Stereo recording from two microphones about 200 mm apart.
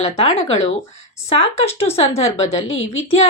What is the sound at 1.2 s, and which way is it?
Speech, 30° left (ahead or behind).